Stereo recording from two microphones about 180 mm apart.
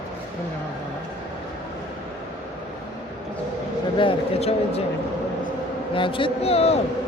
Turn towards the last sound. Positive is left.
turn(degrees=35)  # may be behind; listen again after turning